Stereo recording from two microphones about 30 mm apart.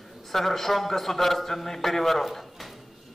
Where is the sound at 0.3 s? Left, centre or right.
Centre.